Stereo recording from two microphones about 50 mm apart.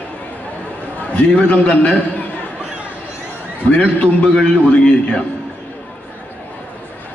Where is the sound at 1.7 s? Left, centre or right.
Left.